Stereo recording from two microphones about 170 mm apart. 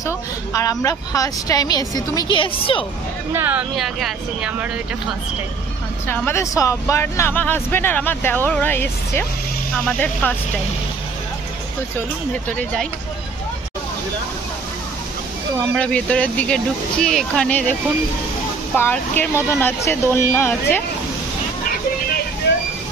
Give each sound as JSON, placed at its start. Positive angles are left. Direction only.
{"t": 0.0, "sound": "a woman's voice", "side_deg": 20}
{"t": 3.3, "sound": "speech", "side_deg": -10}
{"t": 6.0, "sound": "speech", "side_deg": 15}
{"t": 15.7, "sound": "speech", "side_deg": 5}
{"t": 18.8, "sound": "speech", "side_deg": 10}